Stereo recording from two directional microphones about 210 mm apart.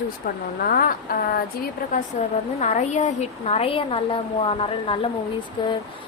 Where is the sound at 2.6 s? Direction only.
35° left (ahead or behind).